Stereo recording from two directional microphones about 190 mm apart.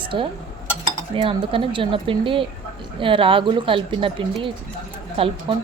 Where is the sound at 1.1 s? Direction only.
30° right (ahead or behind).